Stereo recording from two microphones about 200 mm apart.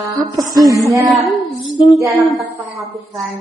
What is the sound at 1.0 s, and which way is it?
A woman's voice, centre (ahead or behind).